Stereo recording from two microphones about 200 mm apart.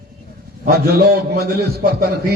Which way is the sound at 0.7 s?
50° right (ahead or behind).